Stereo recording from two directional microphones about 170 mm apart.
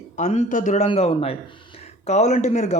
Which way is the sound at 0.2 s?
45° left (ahead or behind).